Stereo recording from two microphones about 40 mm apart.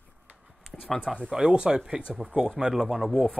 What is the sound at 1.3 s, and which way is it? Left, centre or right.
Speech, right.